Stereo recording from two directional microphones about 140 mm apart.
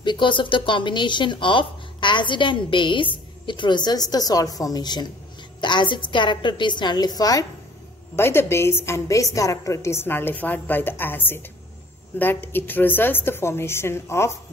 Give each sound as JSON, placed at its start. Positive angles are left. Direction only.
{"t": 0.0, "sound": "a woman's voice", "side_deg": 35}